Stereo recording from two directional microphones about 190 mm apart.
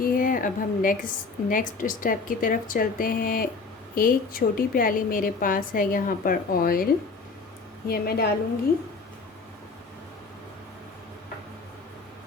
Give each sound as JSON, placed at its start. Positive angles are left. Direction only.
{"t": 0.0, "sound": "a woman's voice", "side_deg": 45}
{"t": 7.9, "sound": "a woman's voice", "side_deg": 55}